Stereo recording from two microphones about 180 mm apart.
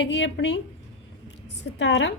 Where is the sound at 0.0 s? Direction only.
75° left (ahead or behind).